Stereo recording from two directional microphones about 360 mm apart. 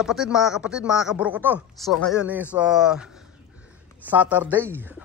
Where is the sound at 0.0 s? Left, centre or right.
Centre.